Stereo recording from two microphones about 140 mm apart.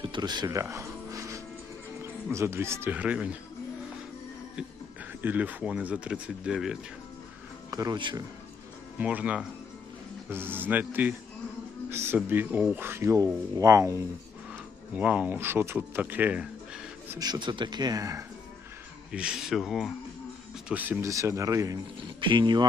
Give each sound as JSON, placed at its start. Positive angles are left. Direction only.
{"t": 0.0, "sound": "music", "side_deg": -35}
{"t": 2.3, "sound": "speech", "side_deg": -20}
{"t": 5.2, "sound": "speech", "side_deg": -10}
{"t": 7.7, "sound": "speech", "side_deg": -25}
{"t": 9.0, "sound": "speech", "side_deg": -10}
{"t": 14.9, "sound": "speech", "side_deg": -10}
{"t": 17.2, "sound": "speech", "side_deg": -30}
{"t": 19.1, "sound": "speech", "side_deg": -5}
{"t": 20.7, "sound": "speech", "side_deg": -10}
{"t": 22.2, "sound": "speech", "side_deg": -35}